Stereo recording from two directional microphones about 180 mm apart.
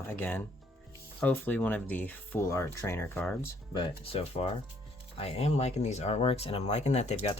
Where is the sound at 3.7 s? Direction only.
30° left (ahead or behind).